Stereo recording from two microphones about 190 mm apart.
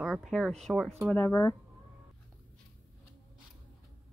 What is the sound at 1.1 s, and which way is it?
Speech, 15° left (ahead or behind).